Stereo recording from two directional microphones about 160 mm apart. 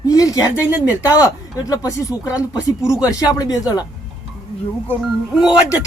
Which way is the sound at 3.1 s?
25° left (ahead or behind).